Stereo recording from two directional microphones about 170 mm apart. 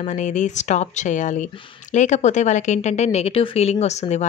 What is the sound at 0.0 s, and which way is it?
A woman's voice, 45° left (ahead or behind).